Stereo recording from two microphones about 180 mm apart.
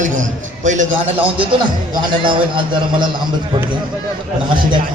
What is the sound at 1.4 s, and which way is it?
A man's voice, 25° right (ahead or behind).